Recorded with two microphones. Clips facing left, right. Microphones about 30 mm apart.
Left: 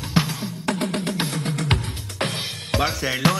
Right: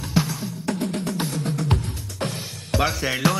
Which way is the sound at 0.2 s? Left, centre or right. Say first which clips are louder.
Left 1 dB; left.